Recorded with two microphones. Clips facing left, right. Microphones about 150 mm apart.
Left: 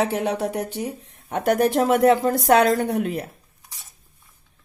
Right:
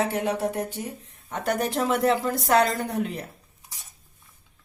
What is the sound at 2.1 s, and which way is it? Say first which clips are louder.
Speech: left 4 dB; 50° left (ahead or behind).